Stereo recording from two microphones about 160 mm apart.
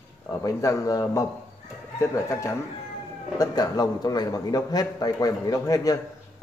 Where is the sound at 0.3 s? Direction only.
20° left (ahead or behind).